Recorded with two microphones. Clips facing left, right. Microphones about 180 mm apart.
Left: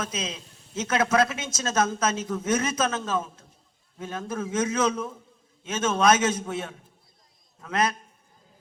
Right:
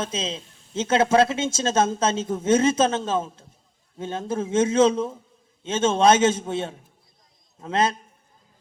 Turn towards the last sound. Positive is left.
turn(degrees=-30)  # may be behind; listen again after turning